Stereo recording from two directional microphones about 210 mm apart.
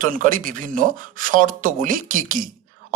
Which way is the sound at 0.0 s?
40° right (ahead or behind).